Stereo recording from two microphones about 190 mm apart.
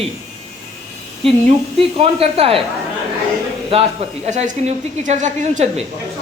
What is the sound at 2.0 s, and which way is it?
Speech, 35° right (ahead or behind).